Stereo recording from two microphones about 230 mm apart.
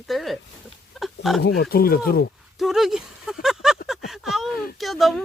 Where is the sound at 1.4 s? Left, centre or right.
Left.